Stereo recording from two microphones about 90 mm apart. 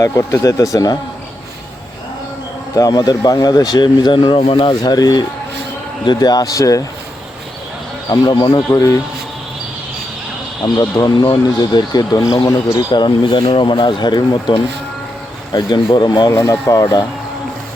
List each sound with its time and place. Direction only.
0.0 s speech: 35° left (ahead or behind)
2.7 s speech: 40° left (ahead or behind); by 4.7 s 85° left
4.7 s speech: 50° left (ahead or behind)
8.1 s speech: 50° left (ahead or behind)
8.7 s speech: 40° left (ahead or behind)
10.8 s speech: 45° left (ahead or behind)
12.9 s speech: 60° left (ahead or behind)
16.0 s speech: 55° left (ahead or behind)
16.3 s speech: 35° left (ahead or behind)